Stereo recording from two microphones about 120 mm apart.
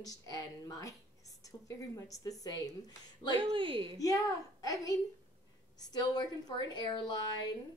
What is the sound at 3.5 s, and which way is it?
Speech, 45° right (ahead or behind).